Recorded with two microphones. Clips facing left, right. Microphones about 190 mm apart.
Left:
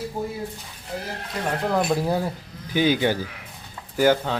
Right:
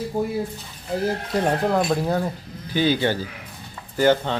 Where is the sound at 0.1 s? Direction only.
50° right (ahead or behind).